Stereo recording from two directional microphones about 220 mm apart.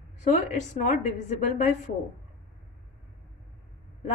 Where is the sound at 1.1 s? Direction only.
30° left (ahead or behind).